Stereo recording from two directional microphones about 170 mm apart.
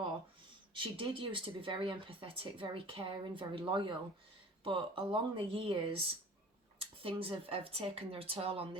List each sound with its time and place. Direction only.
0.7 s speech: 30° right (ahead or behind)